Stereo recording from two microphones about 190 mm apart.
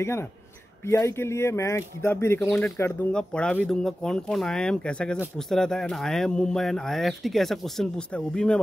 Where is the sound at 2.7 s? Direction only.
10° left (ahead or behind).